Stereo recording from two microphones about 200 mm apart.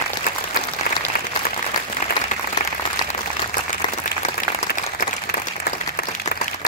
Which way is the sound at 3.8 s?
20° left (ahead or behind).